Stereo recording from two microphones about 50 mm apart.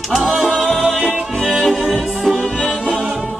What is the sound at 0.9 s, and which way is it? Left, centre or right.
Music, right.